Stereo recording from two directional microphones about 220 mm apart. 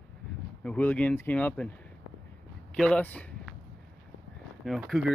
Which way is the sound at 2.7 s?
5° left (ahead or behind).